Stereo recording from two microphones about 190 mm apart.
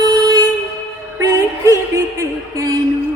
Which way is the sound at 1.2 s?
20° right (ahead or behind).